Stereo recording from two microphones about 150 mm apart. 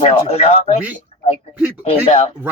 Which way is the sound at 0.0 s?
45° left (ahead or behind).